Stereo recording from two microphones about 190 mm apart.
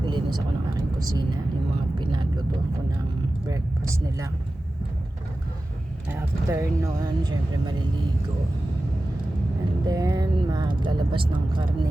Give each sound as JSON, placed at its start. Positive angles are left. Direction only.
{"t": 0.0, "sound": "vehicle", "side_deg": -25}
{"t": 3.5, "sound": "speech", "side_deg": -15}
{"t": 6.1, "sound": "speech", "side_deg": -15}
{"t": 9.8, "sound": "speech", "side_deg": -20}